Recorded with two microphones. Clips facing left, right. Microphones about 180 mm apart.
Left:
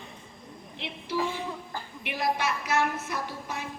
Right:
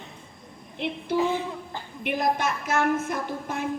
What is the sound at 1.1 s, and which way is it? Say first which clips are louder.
A woman's voice: right 5 dB; 50° right (ahead or behind).